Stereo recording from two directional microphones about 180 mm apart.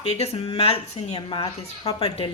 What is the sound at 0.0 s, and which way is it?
Speech, 35° left (ahead or behind).